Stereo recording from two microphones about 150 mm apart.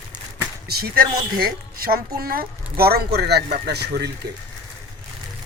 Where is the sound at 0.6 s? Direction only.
90° right.